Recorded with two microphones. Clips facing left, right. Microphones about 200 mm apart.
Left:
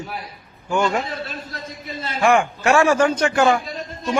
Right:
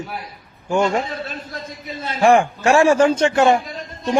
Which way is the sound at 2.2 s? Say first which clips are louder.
Right 3 dB; 35° right (ahead or behind).